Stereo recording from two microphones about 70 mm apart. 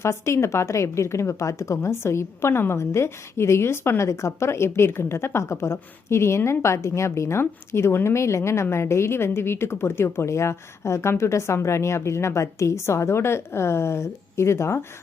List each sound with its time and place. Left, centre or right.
0.0 s a woman's voice: left